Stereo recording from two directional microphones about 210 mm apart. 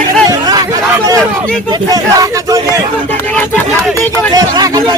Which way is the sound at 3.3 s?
5° left (ahead or behind).